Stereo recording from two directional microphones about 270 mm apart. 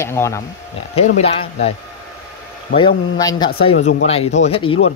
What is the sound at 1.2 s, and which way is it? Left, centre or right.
Speech, left.